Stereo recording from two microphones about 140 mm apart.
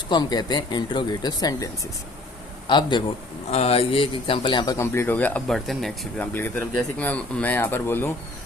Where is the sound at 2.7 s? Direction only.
35° left (ahead or behind).